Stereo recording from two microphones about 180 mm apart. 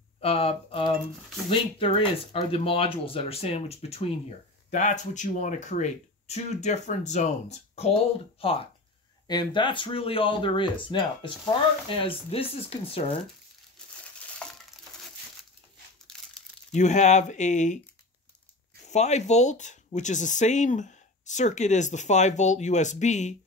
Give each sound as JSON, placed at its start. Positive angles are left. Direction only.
{"t": 0.2, "sound": "speech", "side_deg": 35}
{"t": 14.4, "sound": "crushing", "side_deg": 5}
{"t": 16.7, "sound": "speech", "side_deg": 40}
{"t": 18.9, "sound": "speech", "side_deg": 40}